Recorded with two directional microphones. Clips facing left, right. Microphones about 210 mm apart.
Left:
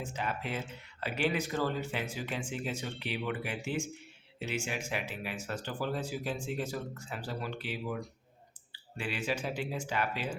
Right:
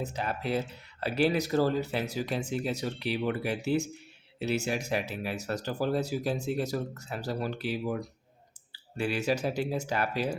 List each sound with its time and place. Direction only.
0.0 s speech: 40° right (ahead or behind)